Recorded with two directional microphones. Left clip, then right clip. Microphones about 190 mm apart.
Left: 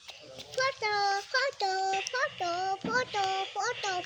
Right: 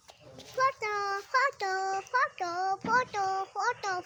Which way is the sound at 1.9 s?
5° left (ahead or behind).